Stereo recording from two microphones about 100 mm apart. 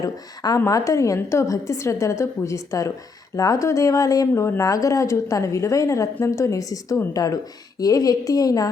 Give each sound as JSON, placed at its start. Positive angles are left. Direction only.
{"t": 0.0, "sound": "a woman's voice", "side_deg": 35}